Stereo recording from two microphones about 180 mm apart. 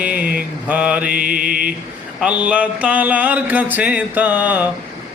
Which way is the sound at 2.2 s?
5° right (ahead or behind).